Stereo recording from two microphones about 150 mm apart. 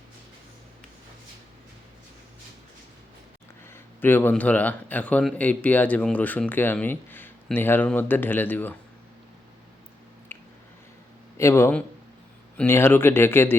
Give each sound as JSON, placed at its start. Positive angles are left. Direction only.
{"t": 3.7, "sound": "a man's voice", "side_deg": 15}
{"t": 10.3, "sound": "a sound", "side_deg": 15}
{"t": 11.3, "sound": "a man's voice", "side_deg": 15}